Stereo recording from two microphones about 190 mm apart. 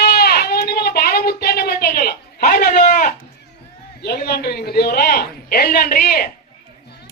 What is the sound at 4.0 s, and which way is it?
A man's voice, 55° left (ahead or behind).